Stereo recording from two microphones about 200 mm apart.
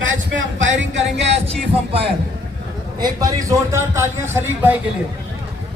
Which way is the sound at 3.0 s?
15° right (ahead or behind).